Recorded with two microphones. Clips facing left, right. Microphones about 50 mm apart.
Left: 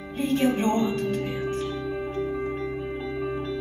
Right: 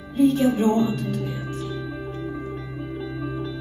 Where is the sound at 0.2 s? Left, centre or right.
Left.